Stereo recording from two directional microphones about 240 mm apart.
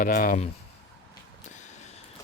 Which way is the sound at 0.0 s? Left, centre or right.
Left.